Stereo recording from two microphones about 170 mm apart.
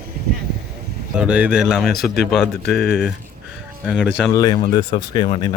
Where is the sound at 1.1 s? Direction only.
5° right (ahead or behind).